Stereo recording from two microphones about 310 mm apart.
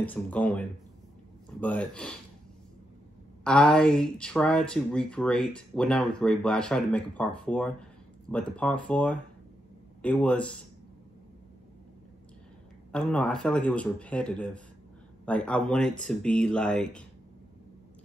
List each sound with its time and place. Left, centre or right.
0.0 s speech: centre
3.4 s speech: centre
12.9 s speech: centre